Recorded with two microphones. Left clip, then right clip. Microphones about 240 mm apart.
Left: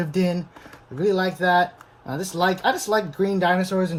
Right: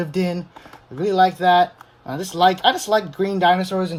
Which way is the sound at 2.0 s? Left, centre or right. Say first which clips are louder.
Right 6 dB; centre.